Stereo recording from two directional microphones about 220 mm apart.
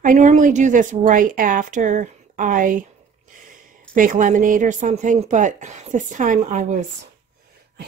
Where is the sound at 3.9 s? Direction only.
35° right (ahead or behind).